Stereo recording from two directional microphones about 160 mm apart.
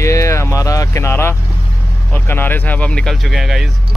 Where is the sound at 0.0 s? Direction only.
20° left (ahead or behind).